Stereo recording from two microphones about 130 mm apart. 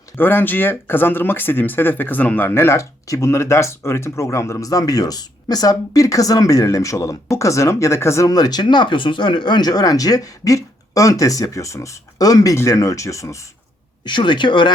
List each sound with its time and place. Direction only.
0.2 s speech: 15° left (ahead or behind)
14.0 s speech: 35° left (ahead or behind)